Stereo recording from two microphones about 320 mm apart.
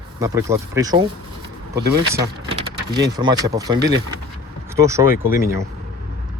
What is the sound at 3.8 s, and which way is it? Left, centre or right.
Speech, right.